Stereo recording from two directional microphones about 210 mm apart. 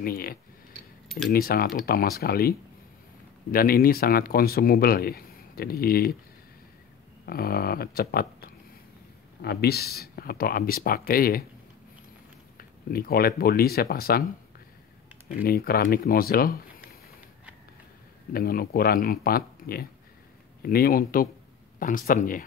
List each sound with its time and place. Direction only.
0.0 s speech: 45° left (ahead or behind)
3.5 s speech: 45° left (ahead or behind)
7.2 s speech: 45° left (ahead or behind)
12.5 s speech: 45° left (ahead or behind)
15.4 s speech: 45° left (ahead or behind)
18.3 s speech: 45° left (ahead or behind)